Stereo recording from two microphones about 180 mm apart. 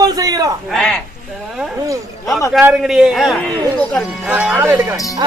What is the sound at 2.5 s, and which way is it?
Speech, 5° right (ahead or behind).